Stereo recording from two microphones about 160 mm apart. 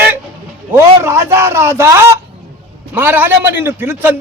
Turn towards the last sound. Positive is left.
turn(degrees=-10)  # may be behind; listen again after turning